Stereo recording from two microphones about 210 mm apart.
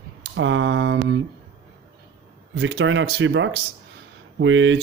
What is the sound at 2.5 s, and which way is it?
Speech, 55° right (ahead or behind).